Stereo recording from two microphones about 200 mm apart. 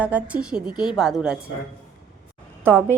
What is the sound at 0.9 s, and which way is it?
Speech, centre (ahead or behind).